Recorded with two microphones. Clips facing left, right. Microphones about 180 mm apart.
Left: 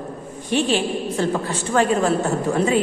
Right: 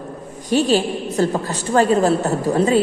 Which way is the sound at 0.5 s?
40° right (ahead or behind).